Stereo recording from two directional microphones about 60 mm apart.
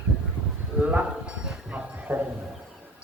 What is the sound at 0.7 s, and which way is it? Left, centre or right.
Sheep, centre.